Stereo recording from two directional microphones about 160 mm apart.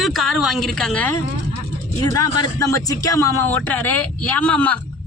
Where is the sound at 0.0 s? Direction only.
Centre (ahead or behind).